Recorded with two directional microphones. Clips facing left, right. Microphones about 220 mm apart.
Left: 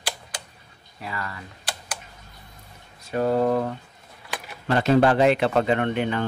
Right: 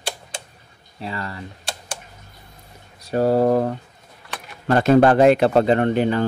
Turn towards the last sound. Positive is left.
turn(degrees=-35)  # may be behind; listen again after turning